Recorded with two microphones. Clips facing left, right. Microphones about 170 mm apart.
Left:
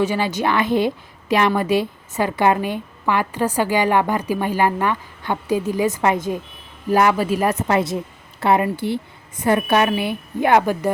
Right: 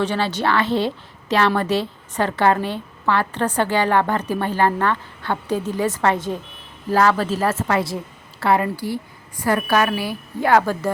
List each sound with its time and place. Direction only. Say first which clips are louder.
0.0 s a woman's voice: left 1 dB; 10° left (ahead or behind)